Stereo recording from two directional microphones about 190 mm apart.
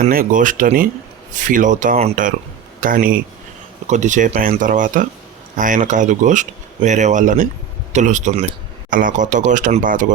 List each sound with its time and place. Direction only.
0.0 s speech: 50° right (ahead or behind)